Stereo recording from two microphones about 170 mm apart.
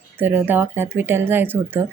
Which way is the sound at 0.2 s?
10° right (ahead or behind).